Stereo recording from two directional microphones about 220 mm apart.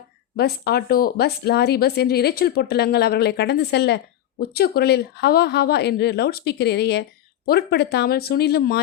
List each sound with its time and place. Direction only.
0.3 s speech: 45° left (ahead or behind)